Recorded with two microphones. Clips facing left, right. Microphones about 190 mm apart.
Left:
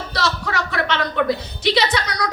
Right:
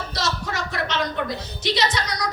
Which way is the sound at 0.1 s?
60° left (ahead or behind).